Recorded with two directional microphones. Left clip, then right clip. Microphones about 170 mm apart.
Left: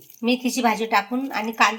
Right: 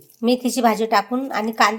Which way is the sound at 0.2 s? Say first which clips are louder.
Right 3 dB; 65° right (ahead or behind).